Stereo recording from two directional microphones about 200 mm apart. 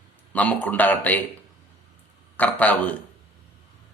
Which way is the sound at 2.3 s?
5° left (ahead or behind).